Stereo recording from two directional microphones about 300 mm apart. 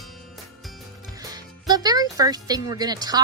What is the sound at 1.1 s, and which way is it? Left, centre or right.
Speech, centre.